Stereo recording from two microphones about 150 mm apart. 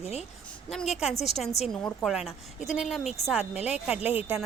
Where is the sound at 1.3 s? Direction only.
45° left (ahead or behind).